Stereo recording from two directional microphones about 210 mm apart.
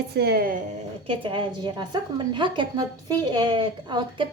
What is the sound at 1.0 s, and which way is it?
A woman's voice, 25° right (ahead or behind).